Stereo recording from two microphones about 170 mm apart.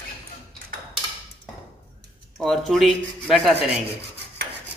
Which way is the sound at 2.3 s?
Centre (ahead or behind).